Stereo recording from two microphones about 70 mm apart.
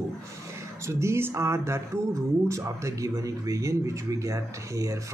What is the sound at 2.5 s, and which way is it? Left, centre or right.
Speech, right.